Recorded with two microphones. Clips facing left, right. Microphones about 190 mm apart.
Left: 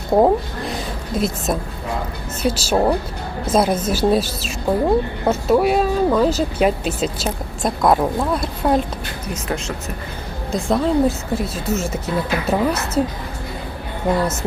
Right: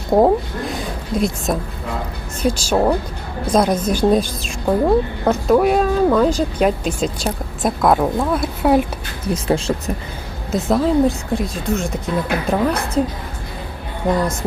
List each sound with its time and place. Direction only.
0.1 s a sound: centre (ahead or behind)
2.4 s speech: 5° left (ahead or behind)
9.3 s speech: 30° right (ahead or behind)
10.5 s speech: centre (ahead or behind)
14.1 s music: 5° left (ahead or behind)